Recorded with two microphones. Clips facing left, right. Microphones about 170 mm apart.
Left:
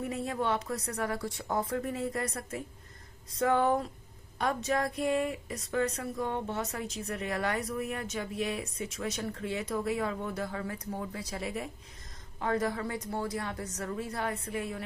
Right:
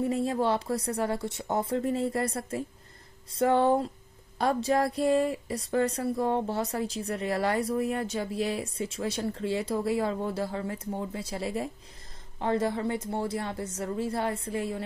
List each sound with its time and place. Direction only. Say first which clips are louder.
0.0 s speech: right 6 dB; 30° right (ahead or behind)